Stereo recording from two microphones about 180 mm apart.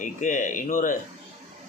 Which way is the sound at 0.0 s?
45° left (ahead or behind).